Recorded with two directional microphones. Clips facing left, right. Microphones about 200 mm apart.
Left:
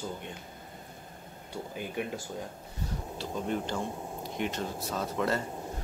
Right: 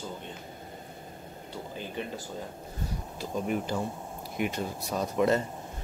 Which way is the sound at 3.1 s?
10° right (ahead or behind).